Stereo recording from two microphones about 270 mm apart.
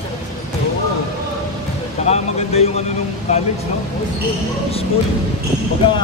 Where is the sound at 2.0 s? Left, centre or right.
Left.